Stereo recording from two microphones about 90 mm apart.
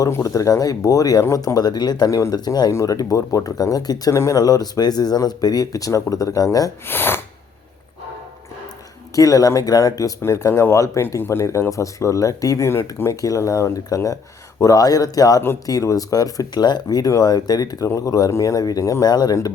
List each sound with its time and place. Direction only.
0.1 s speech: 35° left (ahead or behind)
6.8 s speech: 25° left (ahead or behind)
9.1 s speech: 40° left (ahead or behind)